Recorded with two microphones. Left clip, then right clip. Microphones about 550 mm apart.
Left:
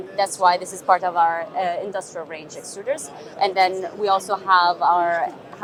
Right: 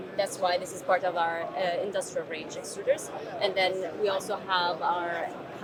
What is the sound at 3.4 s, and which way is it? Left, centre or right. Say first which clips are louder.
A man's voice: left 8 dB; left.